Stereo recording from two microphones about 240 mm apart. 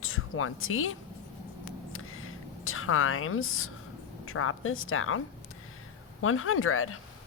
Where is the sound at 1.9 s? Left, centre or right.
Left.